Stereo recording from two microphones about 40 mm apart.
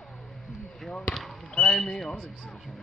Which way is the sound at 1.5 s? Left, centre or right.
Left.